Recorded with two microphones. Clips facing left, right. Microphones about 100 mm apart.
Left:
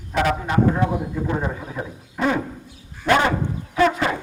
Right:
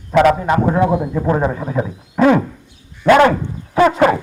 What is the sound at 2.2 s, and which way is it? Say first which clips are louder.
A man's voice: right 9 dB; 60° right (ahead or behind).